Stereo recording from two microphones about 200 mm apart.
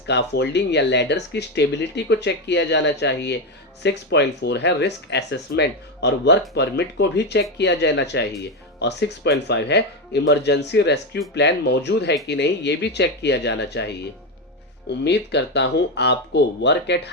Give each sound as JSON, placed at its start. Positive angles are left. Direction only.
{"t": 0.1, "sound": "speech", "side_deg": 60}